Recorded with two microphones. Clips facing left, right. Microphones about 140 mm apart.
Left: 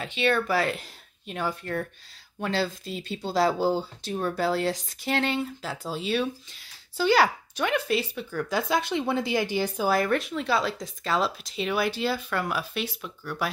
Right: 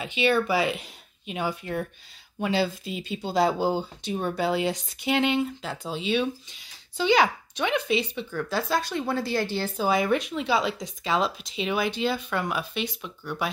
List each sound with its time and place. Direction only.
0.0 s speech: 5° right (ahead or behind)
8.5 s speech: 15° left (ahead or behind)
9.9 s speech: centre (ahead or behind)